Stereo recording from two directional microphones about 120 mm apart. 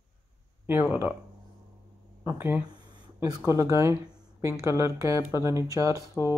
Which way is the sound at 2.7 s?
35° right (ahead or behind).